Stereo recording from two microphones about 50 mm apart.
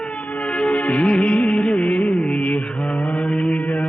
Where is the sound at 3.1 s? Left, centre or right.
Centre.